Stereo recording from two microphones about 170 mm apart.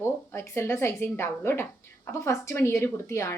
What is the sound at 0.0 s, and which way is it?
A woman's voice, 15° left (ahead or behind).